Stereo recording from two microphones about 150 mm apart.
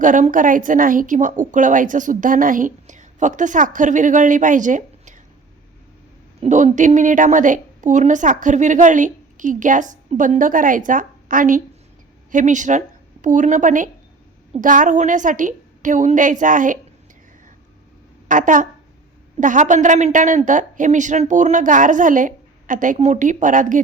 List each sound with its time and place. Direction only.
0.0 s a woman's voice: 60° right (ahead or behind)
6.4 s a woman's voice: 55° right (ahead or behind)
18.3 s a woman's voice: 60° right (ahead or behind)